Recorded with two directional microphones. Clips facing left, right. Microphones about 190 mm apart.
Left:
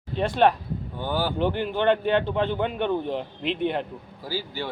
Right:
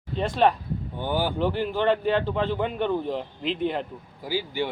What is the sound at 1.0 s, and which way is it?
Speech, 15° right (ahead or behind).